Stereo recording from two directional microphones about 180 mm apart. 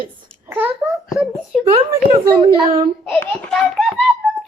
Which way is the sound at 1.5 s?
Centre (ahead or behind).